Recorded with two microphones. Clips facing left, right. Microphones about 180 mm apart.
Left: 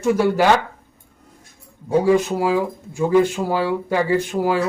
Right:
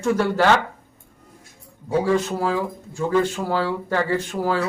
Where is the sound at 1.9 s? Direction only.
15° left (ahead or behind).